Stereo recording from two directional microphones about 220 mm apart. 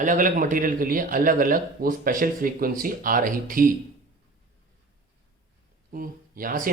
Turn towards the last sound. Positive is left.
turn(degrees=-40)  # may be behind; listen again after turning